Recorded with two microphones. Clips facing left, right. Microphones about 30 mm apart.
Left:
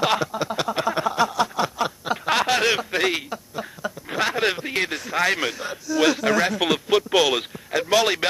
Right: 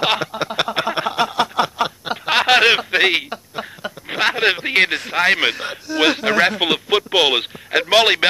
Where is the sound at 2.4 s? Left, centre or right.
Right.